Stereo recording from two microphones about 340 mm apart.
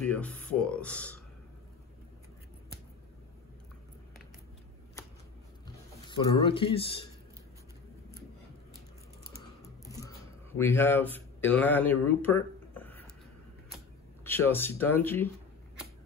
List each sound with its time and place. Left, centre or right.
0.0 s speech: centre
6.0 s speech: centre
10.6 s speech: centre
14.2 s speech: centre